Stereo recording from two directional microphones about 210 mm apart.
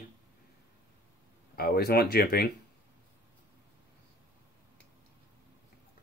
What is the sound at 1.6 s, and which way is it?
Speech, 50° left (ahead or behind).